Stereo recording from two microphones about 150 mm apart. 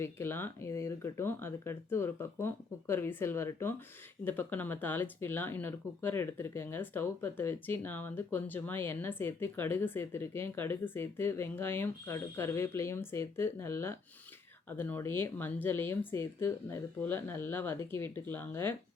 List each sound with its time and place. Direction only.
0.0 s speech: 15° left (ahead or behind)